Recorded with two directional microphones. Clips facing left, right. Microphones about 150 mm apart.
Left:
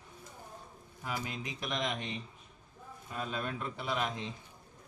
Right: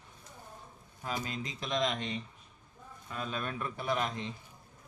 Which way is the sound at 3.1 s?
20° left (ahead or behind).